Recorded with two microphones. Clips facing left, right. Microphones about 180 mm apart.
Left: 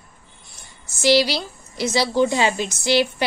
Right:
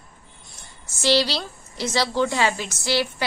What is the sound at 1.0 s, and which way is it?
A woman's voice, 15° left (ahead or behind).